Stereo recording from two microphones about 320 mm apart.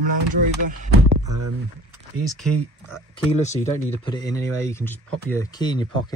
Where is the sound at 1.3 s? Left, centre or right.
Right.